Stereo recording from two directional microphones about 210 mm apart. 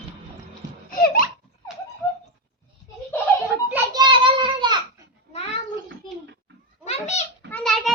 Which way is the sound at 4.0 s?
25° right (ahead or behind).